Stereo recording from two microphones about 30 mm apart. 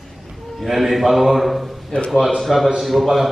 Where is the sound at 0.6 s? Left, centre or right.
Centre.